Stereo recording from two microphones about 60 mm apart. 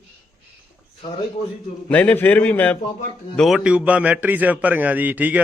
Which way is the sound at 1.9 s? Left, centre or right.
Left.